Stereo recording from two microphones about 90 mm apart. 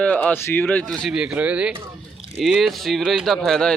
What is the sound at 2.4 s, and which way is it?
Speech, 5° right (ahead or behind).